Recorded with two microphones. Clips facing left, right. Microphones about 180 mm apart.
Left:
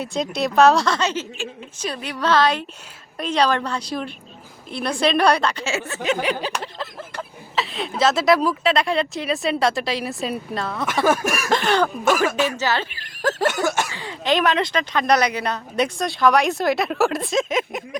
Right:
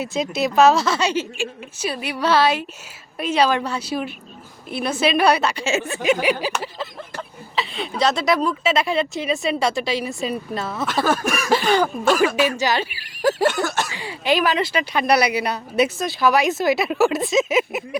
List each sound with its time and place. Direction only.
0.0 s a woman's voice: 5° right (ahead or behind)
11.0 s a sound: 10° left (ahead or behind)
11.4 s cough: 5° right (ahead or behind)
12.2 s speech: 10° right (ahead or behind)
13.5 s a sound: 10° left (ahead or behind)
13.9 s speech: 10° right (ahead or behind)